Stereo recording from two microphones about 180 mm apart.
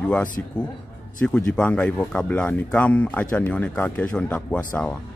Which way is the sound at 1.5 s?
5° left (ahead or behind).